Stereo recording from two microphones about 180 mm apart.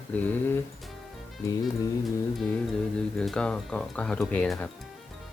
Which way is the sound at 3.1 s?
5° left (ahead or behind).